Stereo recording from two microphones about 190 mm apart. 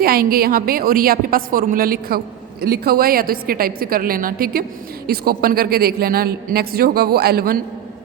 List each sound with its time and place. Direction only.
0.0 s a woman's voice: 50° right (ahead or behind)